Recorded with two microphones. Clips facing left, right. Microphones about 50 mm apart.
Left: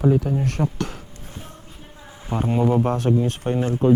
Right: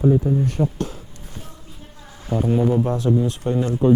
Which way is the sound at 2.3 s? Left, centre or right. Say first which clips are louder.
Right 2 dB; left.